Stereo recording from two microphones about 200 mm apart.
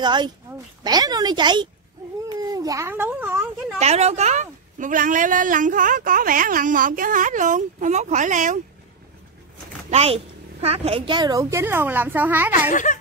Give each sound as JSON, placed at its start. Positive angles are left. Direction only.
{"t": 0.0, "sound": "a woman's voice", "side_deg": -20}
{"t": 3.8, "sound": "a woman's voice", "side_deg": -35}
{"t": 9.8, "sound": "a woman's voice", "side_deg": -30}